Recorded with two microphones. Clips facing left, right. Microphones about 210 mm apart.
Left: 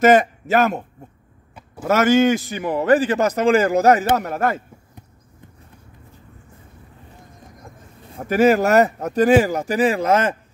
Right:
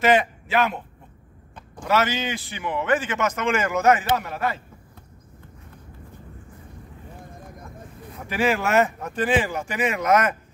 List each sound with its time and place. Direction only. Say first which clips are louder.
0.0 s speech: left 6 dB; 45° left (ahead or behind)
1.9 s a man's voice: left 9 dB; 50° left (ahead or behind)
4.0 s speech: left 5 dB; 50° left (ahead or behind)
8.3 s a man's voice: left 8 dB; 40° left (ahead or behind)